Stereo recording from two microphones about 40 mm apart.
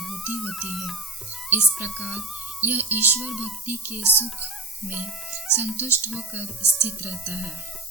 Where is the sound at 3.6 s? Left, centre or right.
Right.